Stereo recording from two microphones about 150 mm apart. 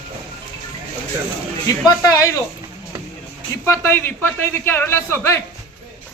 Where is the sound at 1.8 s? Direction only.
25° left (ahead or behind).